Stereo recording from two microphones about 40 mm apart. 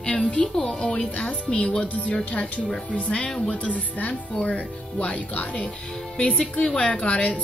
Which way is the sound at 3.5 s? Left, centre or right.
Left.